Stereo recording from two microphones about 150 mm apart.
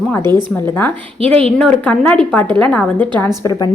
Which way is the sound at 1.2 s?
40° right (ahead or behind).